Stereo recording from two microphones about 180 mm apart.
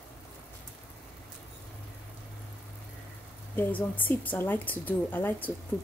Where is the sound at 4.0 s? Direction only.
10° left (ahead or behind).